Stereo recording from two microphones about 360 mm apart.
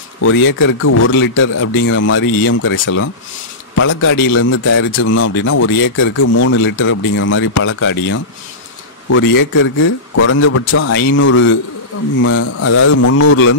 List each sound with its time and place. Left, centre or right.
0.6 s a man's voice: left